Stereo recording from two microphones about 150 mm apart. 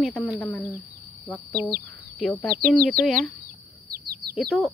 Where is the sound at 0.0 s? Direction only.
Centre (ahead or behind).